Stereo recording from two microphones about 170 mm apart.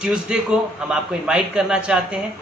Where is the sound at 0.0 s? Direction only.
5° right (ahead or behind).